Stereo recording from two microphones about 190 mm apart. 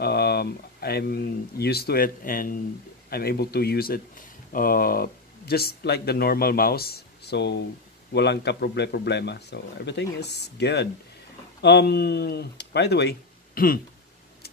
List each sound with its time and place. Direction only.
0.0 s speech: 55° left (ahead or behind)
13.6 s speech: 50° left (ahead or behind)